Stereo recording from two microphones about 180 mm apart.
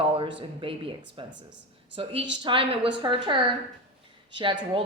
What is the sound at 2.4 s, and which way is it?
Speech, 30° right (ahead or behind).